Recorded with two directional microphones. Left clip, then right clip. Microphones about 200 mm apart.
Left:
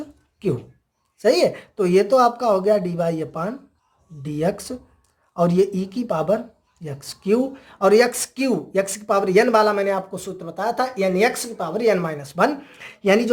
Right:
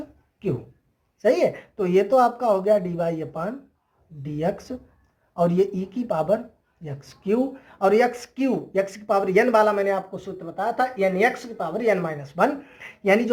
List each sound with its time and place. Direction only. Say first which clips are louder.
1.2 s speech: left 3 dB; 30° left (ahead or behind)